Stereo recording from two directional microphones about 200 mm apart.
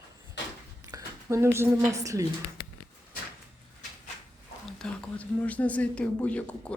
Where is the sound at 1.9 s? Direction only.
15° right (ahead or behind).